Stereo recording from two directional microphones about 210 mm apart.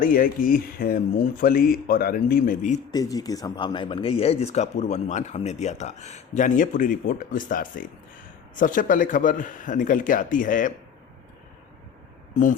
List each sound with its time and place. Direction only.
0.0 s speech: 40° left (ahead or behind)
2.9 s speech: 15° left (ahead or behind); by 10.7 s 40° left (ahead or behind)
12.3 s speech: 40° left (ahead or behind)